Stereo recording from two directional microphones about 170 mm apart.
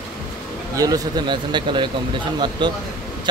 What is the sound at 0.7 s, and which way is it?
Speech, 20° right (ahead or behind).